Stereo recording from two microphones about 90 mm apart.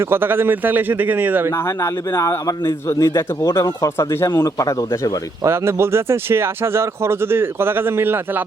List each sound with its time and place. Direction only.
0.1 s speech: 25° right (ahead or behind)
1.8 s a man's voice: 30° left (ahead or behind)
5.5 s speech: 30° right (ahead or behind)